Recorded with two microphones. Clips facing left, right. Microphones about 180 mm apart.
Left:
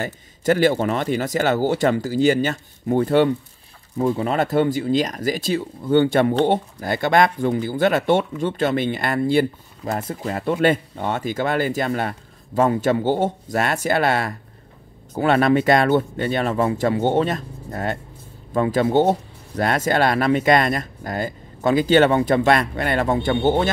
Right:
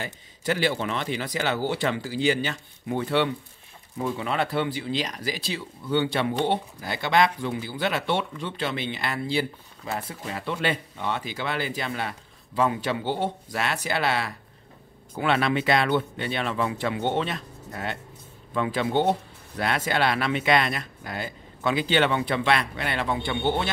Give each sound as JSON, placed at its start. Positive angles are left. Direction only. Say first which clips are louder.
{"t": 0.0, "sound": "speech", "louder": "left 8 dB", "side_deg": 45}